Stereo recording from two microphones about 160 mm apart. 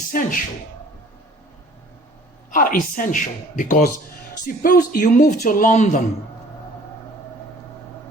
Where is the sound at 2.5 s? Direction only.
60° left (ahead or behind).